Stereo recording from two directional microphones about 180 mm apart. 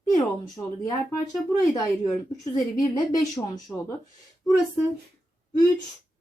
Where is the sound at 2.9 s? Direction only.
20° left (ahead or behind).